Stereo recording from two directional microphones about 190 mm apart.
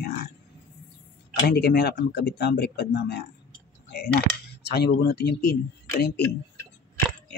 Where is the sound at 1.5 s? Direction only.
60° left (ahead or behind).